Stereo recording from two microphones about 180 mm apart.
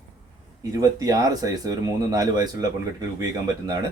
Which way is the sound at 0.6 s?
20° right (ahead or behind).